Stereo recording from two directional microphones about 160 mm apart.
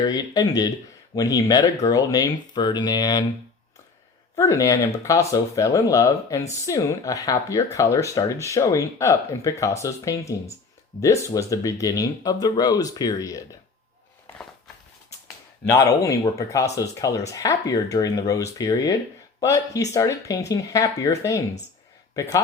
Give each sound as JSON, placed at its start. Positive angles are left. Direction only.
{"t": 0.0, "sound": "speech", "side_deg": 25}
{"t": 4.4, "sound": "speech", "side_deg": 20}
{"t": 15.7, "sound": "speech", "side_deg": 20}